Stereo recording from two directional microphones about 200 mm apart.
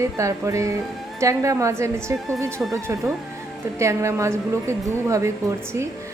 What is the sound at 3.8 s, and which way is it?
A woman's voice, 15° right (ahead or behind).